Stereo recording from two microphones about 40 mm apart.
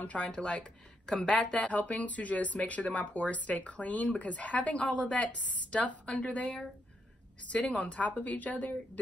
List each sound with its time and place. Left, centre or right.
0.0 s speech: left
1.7 s speech: left